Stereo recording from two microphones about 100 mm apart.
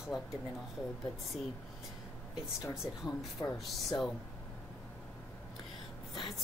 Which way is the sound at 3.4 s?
40° left (ahead or behind).